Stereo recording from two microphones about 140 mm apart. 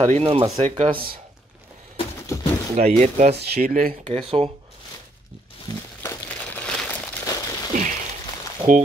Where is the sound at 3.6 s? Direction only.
90° right.